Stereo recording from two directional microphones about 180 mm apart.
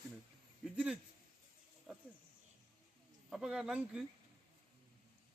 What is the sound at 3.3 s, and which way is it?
Speech, 5° right (ahead or behind).